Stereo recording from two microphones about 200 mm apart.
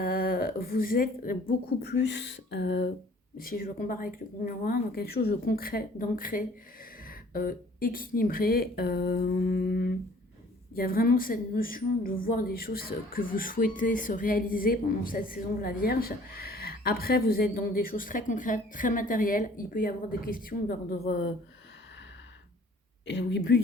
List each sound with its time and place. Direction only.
0.0 s speech: 50° left (ahead or behind)
3.3 s a woman's voice: 45° left (ahead or behind)
23.0 s speech: 60° left (ahead or behind)